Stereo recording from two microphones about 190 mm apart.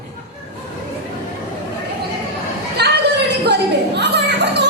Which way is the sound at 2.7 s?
60° right (ahead or behind).